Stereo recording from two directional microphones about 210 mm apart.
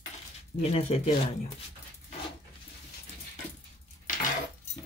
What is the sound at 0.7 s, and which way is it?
Speech, 30° left (ahead or behind).